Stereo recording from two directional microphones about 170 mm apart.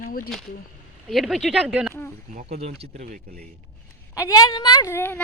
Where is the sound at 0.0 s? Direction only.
55° left (ahead or behind).